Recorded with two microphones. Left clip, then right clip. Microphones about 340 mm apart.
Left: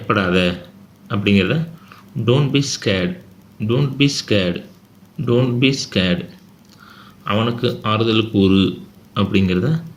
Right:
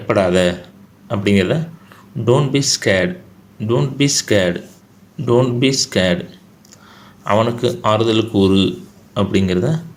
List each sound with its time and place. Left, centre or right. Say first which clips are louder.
0.1 s speech: right 3 dB; centre
7.3 s speech: right 4 dB; centre